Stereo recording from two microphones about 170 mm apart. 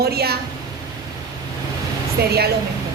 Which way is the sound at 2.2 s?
65° right (ahead or behind).